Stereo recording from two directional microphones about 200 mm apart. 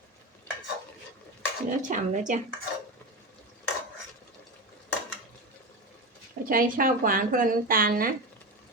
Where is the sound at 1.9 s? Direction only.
40° right (ahead or behind).